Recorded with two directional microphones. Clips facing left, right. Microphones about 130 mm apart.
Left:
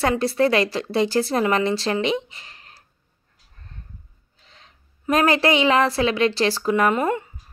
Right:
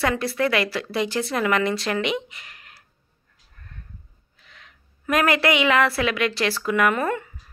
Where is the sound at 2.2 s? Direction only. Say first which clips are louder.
Even; 30° left (ahead or behind).